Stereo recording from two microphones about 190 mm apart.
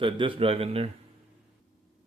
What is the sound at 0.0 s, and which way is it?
Speech, 25° right (ahead or behind).